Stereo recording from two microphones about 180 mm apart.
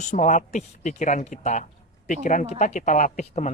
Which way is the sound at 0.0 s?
40° left (ahead or behind).